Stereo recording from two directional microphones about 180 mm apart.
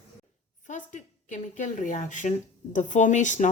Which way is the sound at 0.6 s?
45° left (ahead or behind).